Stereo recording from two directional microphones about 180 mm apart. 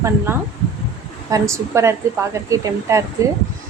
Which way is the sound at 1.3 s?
15° right (ahead or behind).